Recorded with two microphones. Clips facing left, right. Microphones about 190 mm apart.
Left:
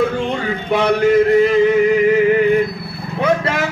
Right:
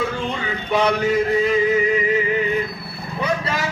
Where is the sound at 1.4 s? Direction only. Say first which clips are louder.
Left 6 dB; 70° left (ahead or behind).